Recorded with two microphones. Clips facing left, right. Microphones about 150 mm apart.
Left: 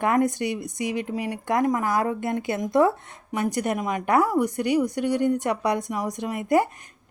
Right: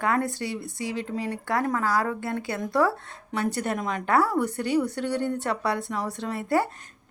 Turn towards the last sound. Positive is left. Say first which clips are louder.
# left 3 dB
turn(degrees=15)  # may be behind; listen again after turning